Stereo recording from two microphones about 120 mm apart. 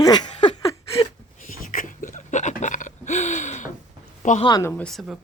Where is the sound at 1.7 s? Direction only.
90° left.